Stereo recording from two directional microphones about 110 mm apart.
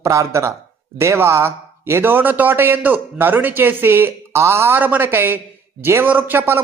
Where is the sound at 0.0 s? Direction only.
30° right (ahead or behind).